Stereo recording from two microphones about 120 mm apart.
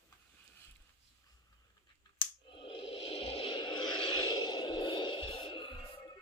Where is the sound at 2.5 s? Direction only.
45° left (ahead or behind).